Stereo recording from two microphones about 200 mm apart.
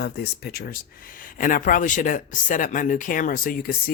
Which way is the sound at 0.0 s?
55° left (ahead or behind).